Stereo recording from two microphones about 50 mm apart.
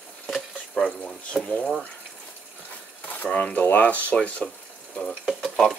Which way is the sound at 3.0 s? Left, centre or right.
Left.